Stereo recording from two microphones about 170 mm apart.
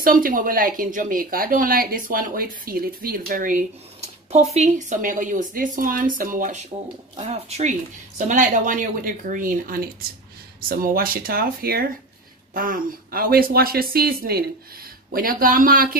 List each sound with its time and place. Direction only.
0.0 s speech: 55° right (ahead or behind)
7.2 s speech: 40° right (ahead or behind)
8.2 s speech: 50° right (ahead or behind)